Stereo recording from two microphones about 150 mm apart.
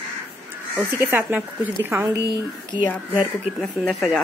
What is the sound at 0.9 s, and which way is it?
A woman's voice, 15° right (ahead or behind).